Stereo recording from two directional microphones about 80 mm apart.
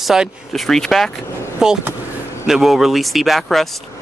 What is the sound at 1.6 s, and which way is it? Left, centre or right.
Speech, centre.